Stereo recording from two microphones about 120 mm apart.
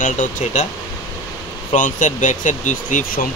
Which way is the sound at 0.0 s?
90° left.